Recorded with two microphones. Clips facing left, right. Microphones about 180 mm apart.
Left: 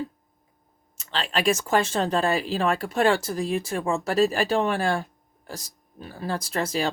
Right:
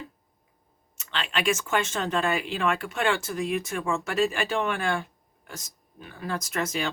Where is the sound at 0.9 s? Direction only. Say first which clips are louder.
Left 3 dB; 35° left (ahead or behind).